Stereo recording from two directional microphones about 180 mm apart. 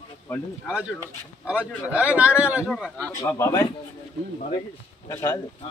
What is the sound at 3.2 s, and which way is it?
Speech, 20° left (ahead or behind).